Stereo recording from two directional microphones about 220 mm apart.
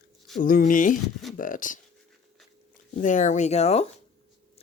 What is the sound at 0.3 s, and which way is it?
Speech, 40° left (ahead or behind).